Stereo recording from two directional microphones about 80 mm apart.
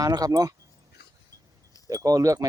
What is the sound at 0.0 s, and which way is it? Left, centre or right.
Speech, right.